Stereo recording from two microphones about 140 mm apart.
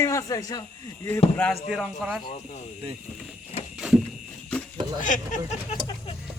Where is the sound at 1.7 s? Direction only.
5° right (ahead or behind).